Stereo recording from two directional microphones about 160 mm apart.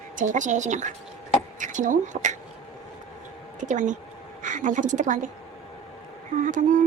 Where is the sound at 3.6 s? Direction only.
50° right (ahead or behind).